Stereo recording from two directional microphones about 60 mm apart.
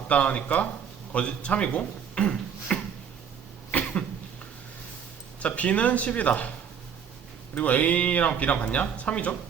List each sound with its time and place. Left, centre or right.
0.1 s speech: left
3.7 s cough: left
5.4 s speech: left
7.5 s speech: left